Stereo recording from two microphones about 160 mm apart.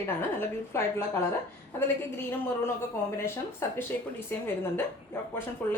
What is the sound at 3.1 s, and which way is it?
A woman's voice, 15° left (ahead or behind).